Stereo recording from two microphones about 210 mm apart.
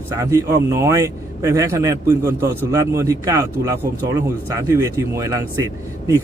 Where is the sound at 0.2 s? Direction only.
15° right (ahead or behind).